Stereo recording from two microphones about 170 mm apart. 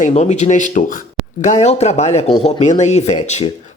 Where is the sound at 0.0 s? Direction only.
40° left (ahead or behind).